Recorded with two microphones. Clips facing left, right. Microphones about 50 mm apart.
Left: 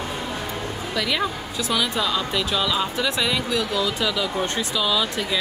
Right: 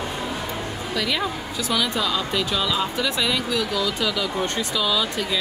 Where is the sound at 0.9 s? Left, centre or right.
Centre.